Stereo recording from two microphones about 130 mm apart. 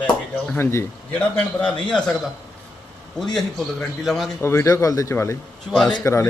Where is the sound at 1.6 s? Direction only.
10° left (ahead or behind).